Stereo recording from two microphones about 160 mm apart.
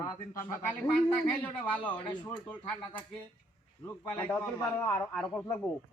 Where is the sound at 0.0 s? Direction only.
15° left (ahead or behind).